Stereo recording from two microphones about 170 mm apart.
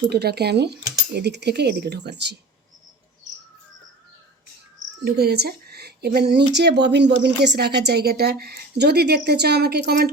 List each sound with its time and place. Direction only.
0.1 s a woman's voice: 70° right (ahead or behind)
5.0 s a woman's voice: 70° right (ahead or behind)